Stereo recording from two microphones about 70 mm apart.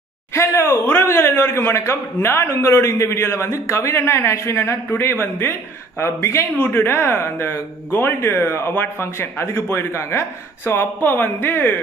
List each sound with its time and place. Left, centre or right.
0.3 s speech: left